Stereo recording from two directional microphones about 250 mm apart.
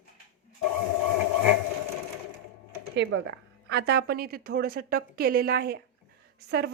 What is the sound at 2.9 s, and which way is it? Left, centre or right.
A woman's voice, right.